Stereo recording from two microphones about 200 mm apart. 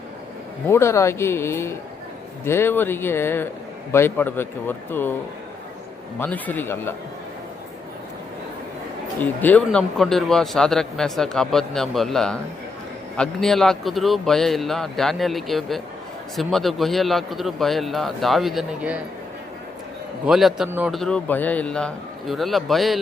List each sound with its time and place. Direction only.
0.7 s a man's voice: 15° left (ahead or behind)
6.1 s a man's voice: 10° left (ahead or behind)
9.2 s a man's voice: 10° left (ahead or behind)
20.2 s a man's voice: centre (ahead or behind)